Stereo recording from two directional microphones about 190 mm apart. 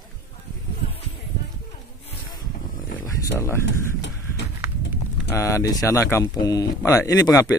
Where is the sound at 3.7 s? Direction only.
70° left (ahead or behind).